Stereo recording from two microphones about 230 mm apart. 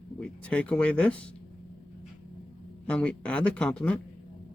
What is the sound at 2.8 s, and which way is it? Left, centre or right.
Speech, centre.